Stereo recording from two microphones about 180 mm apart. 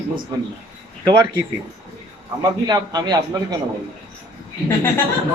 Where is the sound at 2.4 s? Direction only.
20° right (ahead or behind).